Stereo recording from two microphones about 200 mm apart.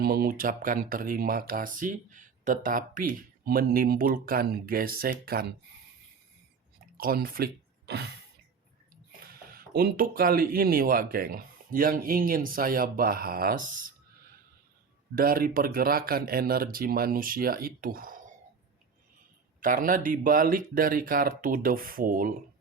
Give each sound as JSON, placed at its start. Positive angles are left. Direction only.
{"t": 0.0, "sound": "speech", "side_deg": -50}
{"t": 6.9, "sound": "speech", "side_deg": -45}
{"t": 9.2, "sound": "speech", "side_deg": -45}
{"t": 15.1, "sound": "speech", "side_deg": -45}
{"t": 19.5, "sound": "speech", "side_deg": -40}